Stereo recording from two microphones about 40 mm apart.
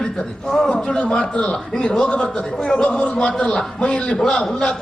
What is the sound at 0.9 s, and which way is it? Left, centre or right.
A man's voice, left.